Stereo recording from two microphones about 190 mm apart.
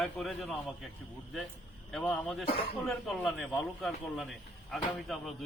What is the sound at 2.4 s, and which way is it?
Speech, 30° left (ahead or behind).